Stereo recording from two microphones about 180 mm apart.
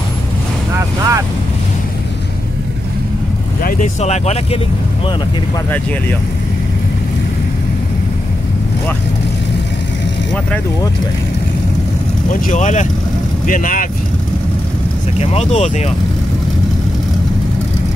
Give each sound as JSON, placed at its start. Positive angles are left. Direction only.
{"t": 0.7, "sound": "speech", "side_deg": -15}
{"t": 3.6, "sound": "speech", "side_deg": 40}
{"t": 12.3, "sound": "speech", "side_deg": 45}
{"t": 15.1, "sound": "speech", "side_deg": 40}